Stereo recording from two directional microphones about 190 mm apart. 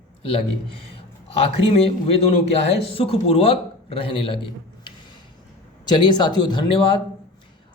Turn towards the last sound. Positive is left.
turn(degrees=25)  # may be behind; listen again after turning